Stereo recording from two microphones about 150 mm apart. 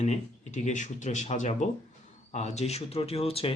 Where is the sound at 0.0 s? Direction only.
50° left (ahead or behind).